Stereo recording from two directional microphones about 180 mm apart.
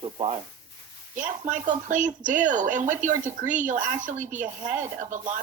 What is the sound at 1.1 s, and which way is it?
Speech, 45° right (ahead or behind).